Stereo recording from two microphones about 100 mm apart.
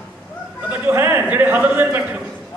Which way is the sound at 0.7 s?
20° right (ahead or behind).